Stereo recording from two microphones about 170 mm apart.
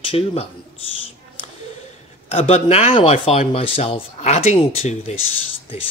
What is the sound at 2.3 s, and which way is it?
Speech, 35° left (ahead or behind).